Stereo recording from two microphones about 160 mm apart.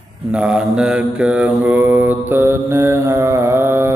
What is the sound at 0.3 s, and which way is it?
Mantra, 5° right (ahead or behind).